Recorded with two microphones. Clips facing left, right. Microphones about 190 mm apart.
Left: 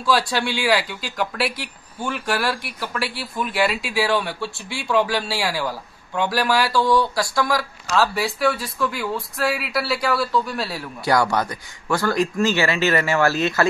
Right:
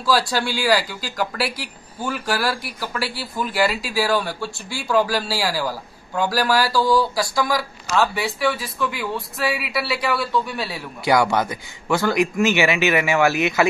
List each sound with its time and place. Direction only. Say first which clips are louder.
0.0 s speech: even; centre (ahead or behind)
11.3 s speech: right 1 dB; 20° right (ahead or behind)